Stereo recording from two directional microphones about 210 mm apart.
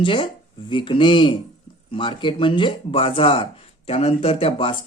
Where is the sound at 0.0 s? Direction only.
25° left (ahead or behind).